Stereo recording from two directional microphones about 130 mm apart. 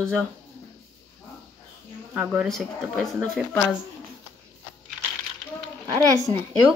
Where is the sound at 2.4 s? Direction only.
Centre (ahead or behind).